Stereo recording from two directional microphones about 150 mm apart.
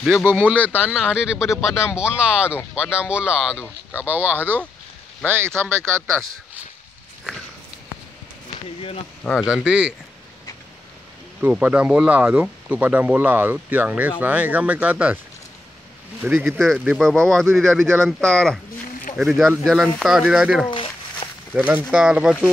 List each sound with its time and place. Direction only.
0.3 s speech: 10° right (ahead or behind)
3.5 s speech: 15° left (ahead or behind)
4.0 s speech: 10° right (ahead or behind)
9.2 s speech: centre (ahead or behind)
11.4 s speech: 10° right (ahead or behind)
16.3 s speech: 10° right (ahead or behind)
20.7 s a sound: 35° left (ahead or behind)
21.5 s speech: 10° right (ahead or behind)